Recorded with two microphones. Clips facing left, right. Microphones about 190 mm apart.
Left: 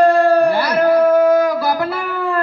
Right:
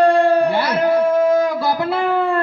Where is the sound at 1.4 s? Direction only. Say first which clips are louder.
Left 2 dB; 25° right (ahead or behind).